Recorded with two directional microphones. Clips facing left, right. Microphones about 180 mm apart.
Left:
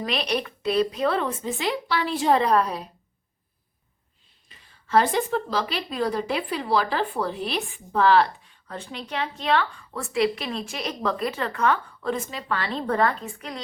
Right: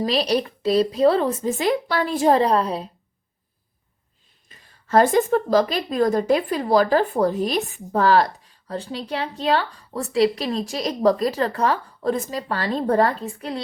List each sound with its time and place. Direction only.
0.0 s a woman's voice: 35° right (ahead or behind)
4.4 s a woman's voice: 45° right (ahead or behind)